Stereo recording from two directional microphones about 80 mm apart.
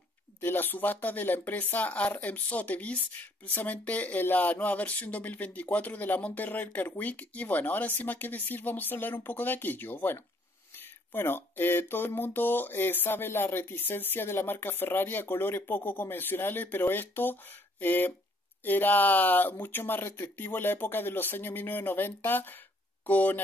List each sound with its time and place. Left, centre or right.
0.4 s speech: left